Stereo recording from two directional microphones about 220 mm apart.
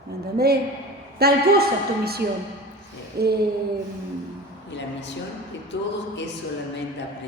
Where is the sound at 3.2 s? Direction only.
45° right (ahead or behind).